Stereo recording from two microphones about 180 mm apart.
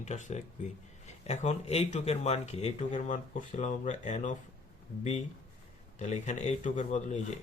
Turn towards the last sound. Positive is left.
turn(degrees=40)  # may be behind; listen again after turning